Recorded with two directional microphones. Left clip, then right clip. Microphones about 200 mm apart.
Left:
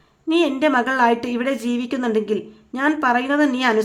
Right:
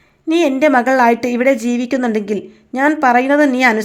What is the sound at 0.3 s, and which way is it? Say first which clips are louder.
A woman's voice: right 5 dB; 25° right (ahead or behind).